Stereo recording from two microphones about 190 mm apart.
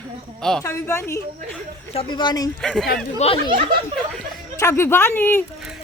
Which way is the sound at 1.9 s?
30° left (ahead or behind).